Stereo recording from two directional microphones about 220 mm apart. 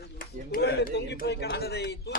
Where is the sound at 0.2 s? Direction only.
45° left (ahead or behind).